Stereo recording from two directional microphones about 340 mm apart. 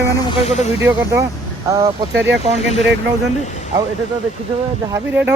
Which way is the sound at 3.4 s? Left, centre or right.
Centre.